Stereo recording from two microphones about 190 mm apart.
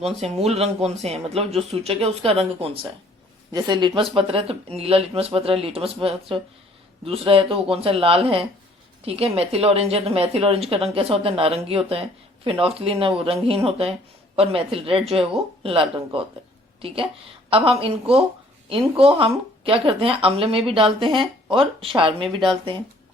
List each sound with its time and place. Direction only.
0.0 s a woman's voice: 35° right (ahead or behind)